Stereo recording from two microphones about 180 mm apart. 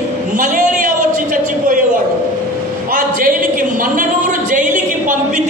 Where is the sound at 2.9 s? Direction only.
50° right (ahead or behind).